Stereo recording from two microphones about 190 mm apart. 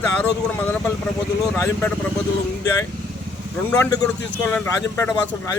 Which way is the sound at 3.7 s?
10° left (ahead or behind).